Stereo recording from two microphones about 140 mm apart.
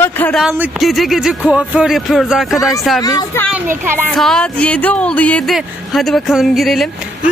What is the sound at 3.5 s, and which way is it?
Speech, 15° right (ahead or behind).